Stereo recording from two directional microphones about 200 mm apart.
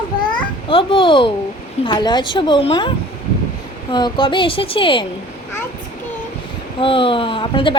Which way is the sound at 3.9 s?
25° left (ahead or behind).